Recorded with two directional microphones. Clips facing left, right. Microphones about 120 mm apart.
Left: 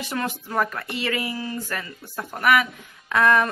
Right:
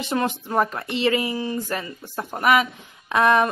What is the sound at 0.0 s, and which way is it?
Speech, 25° right (ahead or behind).